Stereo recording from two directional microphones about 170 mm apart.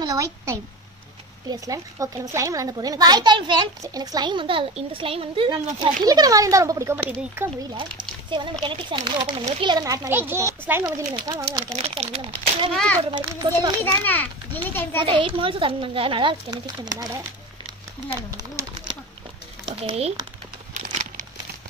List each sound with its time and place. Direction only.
0.0 s a woman's voice: 20° right (ahead or behind)
7.7 s a child's voice: 30° right (ahead or behind)
10.0 s a child's voice: 15° right (ahead or behind)
11.7 s speech: 35° right (ahead or behind)
12.3 s a child's voice: 10° left (ahead or behind)
13.1 s a child's voice: 25° right (ahead or behind)
14.0 s a child's voice: 10° left (ahead or behind)
15.0 s a child's voice: 30° right (ahead or behind)
18.6 s bird: 15° right (ahead or behind)
19.6 s speech: 35° right (ahead or behind)
20.8 s a sound: 45° right (ahead or behind)